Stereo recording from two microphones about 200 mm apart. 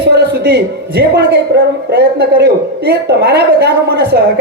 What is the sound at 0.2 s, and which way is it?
A man's voice, 55° right (ahead or behind).